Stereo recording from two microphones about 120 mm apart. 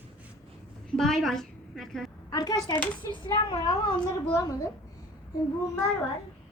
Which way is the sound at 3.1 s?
45° left (ahead or behind).